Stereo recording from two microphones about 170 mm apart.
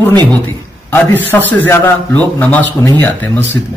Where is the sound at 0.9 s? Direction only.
10° left (ahead or behind).